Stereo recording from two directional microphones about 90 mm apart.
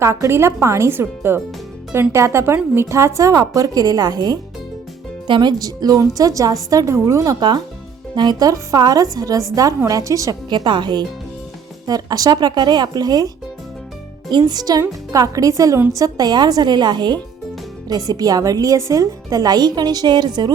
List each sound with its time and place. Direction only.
0.0 s a woman's voice: 35° right (ahead or behind)
10.5 s a woman's voice: 60° right (ahead or behind)
11.9 s a woman's voice: 45° right (ahead or behind)